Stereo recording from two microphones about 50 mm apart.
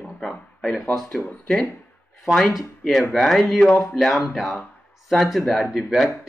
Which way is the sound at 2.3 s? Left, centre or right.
Centre.